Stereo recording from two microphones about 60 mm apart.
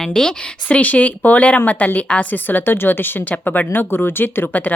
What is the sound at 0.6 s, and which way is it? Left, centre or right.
A woman's voice, left.